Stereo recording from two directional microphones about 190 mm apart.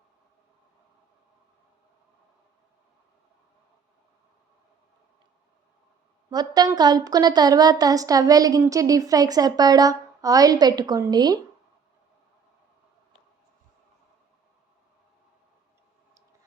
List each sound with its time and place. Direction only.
6.3 s a woman's voice: 20° right (ahead or behind)